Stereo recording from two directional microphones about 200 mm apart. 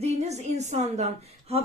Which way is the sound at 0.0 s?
35° right (ahead or behind).